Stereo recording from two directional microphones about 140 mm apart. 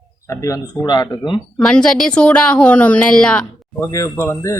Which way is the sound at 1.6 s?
5° left (ahead or behind).